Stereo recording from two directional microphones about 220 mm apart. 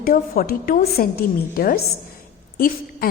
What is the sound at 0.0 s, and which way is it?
A woman's voice, 40° left (ahead or behind).